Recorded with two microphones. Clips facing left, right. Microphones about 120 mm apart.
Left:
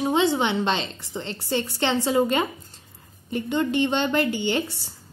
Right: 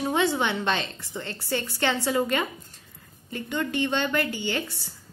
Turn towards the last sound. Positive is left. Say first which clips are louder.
# left 4 dB
turn(degrees=25)  # may be behind; listen again after turning